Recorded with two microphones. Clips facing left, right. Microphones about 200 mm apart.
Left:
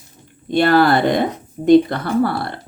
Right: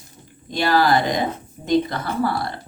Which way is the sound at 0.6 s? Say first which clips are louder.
Left 4 dB; 60° left (ahead or behind).